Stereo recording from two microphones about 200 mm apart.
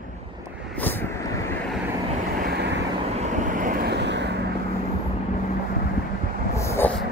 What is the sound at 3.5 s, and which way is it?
Vehicle, 40° right (ahead or behind).